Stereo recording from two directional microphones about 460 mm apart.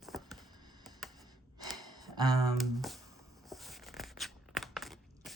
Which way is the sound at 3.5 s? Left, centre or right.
Centre.